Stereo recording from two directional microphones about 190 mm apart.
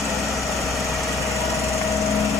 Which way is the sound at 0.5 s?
Centre (ahead or behind).